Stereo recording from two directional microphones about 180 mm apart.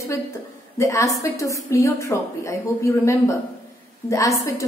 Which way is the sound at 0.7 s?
15° left (ahead or behind).